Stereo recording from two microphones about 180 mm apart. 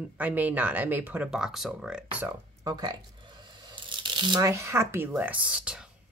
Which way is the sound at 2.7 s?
25° right (ahead or behind).